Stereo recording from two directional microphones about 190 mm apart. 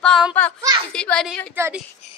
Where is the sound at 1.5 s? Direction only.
10° right (ahead or behind).